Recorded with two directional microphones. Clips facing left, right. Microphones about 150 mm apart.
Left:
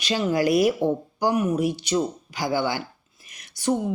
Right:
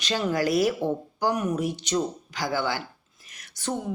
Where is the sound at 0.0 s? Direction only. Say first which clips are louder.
Left 3 dB; 15° left (ahead or behind).